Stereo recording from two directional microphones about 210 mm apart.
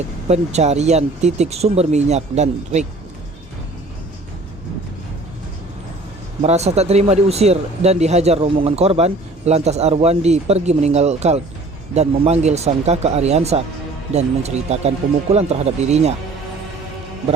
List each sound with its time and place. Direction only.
0.3 s speech: 30° right (ahead or behind)
6.4 s speech: 30° right (ahead or behind)